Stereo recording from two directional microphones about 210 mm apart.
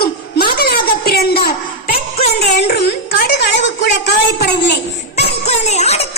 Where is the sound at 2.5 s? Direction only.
50° left (ahead or behind).